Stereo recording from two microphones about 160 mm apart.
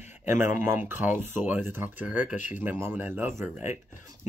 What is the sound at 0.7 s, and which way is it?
Cough, 10° right (ahead or behind).